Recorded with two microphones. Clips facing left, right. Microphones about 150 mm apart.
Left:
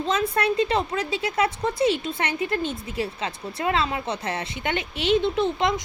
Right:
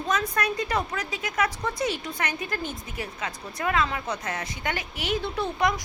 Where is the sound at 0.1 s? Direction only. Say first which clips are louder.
Left 3 dB; 30° left (ahead or behind).